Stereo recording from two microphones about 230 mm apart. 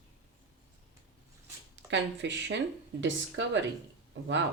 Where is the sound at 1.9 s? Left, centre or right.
Right.